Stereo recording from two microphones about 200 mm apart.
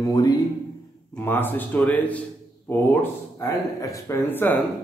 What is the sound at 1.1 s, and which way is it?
Speech, 10° left (ahead or behind).